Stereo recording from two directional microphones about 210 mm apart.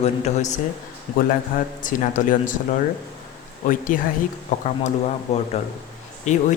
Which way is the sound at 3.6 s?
40° left (ahead or behind).